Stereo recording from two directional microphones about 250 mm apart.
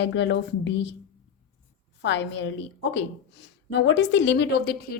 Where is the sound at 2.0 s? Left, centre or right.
Left.